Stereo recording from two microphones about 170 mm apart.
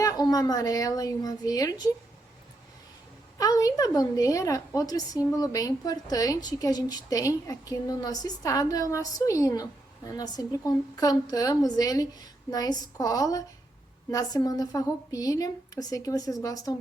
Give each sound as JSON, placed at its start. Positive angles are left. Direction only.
{"t": 0.0, "sound": "a woman's voice", "side_deg": 20}
{"t": 3.3, "sound": "a woman's voice", "side_deg": 20}